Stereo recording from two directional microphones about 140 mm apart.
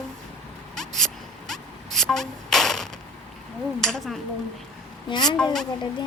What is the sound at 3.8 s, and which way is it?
Speech, centre (ahead or behind).